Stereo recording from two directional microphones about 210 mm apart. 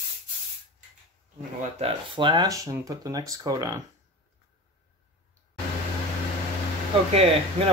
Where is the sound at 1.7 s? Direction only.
25° right (ahead or behind).